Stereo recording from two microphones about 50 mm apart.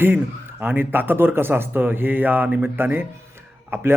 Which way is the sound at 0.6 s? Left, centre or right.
Right.